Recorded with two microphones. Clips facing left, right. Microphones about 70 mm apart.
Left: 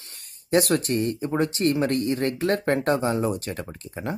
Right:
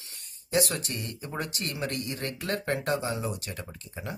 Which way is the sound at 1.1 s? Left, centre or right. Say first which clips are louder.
Left 10 dB; left.